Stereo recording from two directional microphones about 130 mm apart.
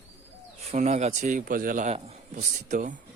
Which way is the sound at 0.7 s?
60° right (ahead or behind).